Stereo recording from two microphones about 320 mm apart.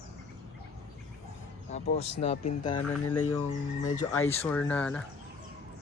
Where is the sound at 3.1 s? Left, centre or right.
Left.